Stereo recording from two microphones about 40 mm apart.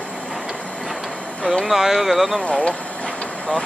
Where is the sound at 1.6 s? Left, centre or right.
Centre.